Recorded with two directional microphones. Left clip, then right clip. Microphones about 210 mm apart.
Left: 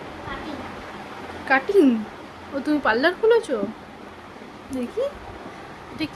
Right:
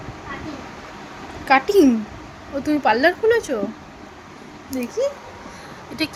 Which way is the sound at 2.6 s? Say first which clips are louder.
Right 3 dB; 5° left (ahead or behind).